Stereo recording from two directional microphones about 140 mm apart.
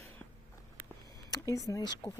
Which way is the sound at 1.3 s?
25° left (ahead or behind).